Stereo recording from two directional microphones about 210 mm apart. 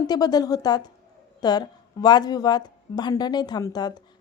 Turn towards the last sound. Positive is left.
turn(degrees=20)  # may be behind; listen again after turning